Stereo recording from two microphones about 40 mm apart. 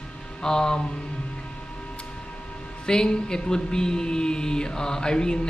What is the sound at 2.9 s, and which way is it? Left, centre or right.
Music, centre.